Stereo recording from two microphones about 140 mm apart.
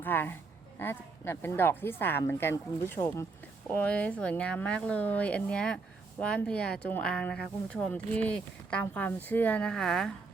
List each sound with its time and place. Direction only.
0.0 s speech: 15° left (ahead or behind)